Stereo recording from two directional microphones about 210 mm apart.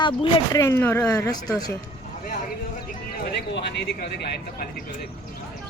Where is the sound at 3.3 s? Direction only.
55° left (ahead or behind).